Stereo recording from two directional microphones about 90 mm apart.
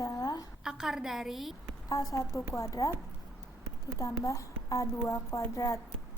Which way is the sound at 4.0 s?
35° left (ahead or behind).